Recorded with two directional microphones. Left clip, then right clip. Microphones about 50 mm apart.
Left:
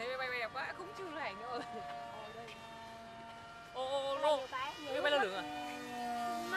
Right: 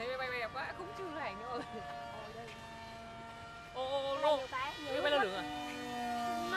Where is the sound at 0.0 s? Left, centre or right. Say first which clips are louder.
Even; centre.